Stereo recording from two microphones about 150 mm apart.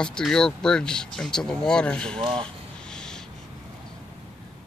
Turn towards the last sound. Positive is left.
turn(degrees=5)  # may be behind; listen again after turning